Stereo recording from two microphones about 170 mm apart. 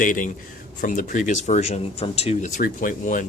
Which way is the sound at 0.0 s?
50° left (ahead or behind).